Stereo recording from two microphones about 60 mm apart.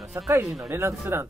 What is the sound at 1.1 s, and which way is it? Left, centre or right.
Speech, right.